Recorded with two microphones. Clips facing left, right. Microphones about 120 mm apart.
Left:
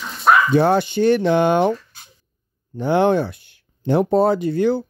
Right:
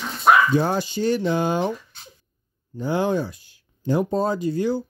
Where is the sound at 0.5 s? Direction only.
65° left (ahead or behind).